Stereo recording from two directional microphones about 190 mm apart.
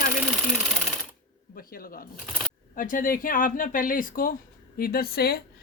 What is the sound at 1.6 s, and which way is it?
Speech, 50° left (ahead or behind).